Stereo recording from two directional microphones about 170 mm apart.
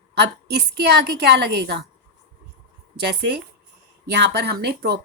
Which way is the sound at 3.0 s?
70° right (ahead or behind).